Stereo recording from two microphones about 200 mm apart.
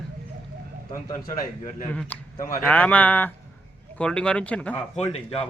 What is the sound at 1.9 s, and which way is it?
Speech, 5° left (ahead or behind).